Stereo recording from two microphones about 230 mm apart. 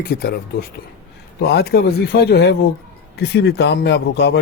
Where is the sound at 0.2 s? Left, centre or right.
Left.